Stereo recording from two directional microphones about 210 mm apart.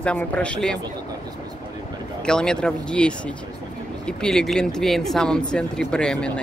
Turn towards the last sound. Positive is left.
turn(degrees=5)  # may be behind; listen again after turning